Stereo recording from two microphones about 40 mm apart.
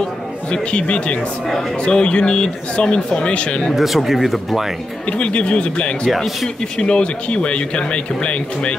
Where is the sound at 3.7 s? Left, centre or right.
Centre.